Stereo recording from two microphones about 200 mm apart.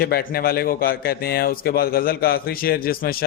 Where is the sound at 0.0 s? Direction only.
50° left (ahead or behind).